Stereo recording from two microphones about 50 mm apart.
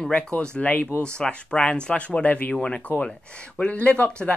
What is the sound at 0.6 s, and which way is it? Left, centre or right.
Speech, left.